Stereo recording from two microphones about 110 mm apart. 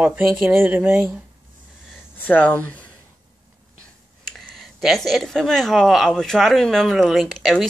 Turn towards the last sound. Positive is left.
turn(degrees=0)  # may be behind; listen again after turning